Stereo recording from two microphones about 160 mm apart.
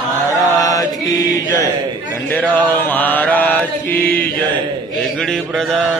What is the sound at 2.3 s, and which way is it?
Mantra, 10° left (ahead or behind).